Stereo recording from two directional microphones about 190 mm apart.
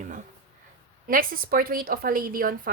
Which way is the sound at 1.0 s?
50° right (ahead or behind).